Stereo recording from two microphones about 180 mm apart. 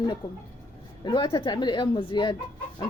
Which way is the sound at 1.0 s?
25° left (ahead or behind).